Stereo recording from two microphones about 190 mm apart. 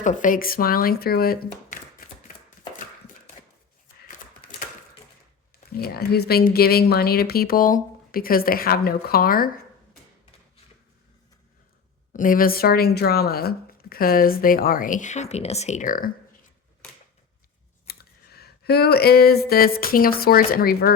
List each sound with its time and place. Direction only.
0.0 s speech: 40° left (ahead or behind)
5.7 s speech: 55° left (ahead or behind)
12.1 s speech: 45° left (ahead or behind)
17.8 s speech: 55° left (ahead or behind)